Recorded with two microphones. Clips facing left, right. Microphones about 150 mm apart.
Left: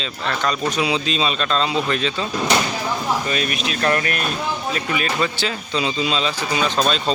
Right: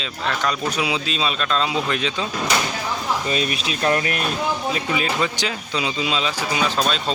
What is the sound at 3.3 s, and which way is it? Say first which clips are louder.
Speech: even; 25° right (ahead or behind).